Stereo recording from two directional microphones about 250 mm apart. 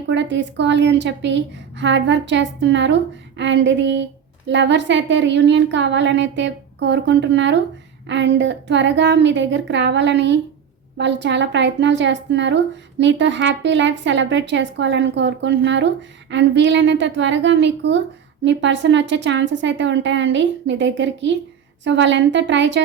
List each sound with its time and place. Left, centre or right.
0.1 s a woman's voice: right